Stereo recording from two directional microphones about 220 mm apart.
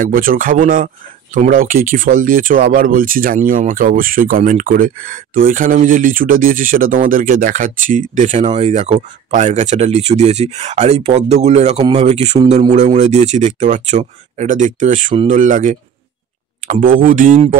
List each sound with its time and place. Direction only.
0.0 s speech: 40° right (ahead or behind)